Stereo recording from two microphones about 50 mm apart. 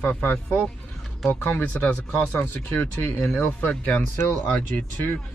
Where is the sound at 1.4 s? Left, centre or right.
Left.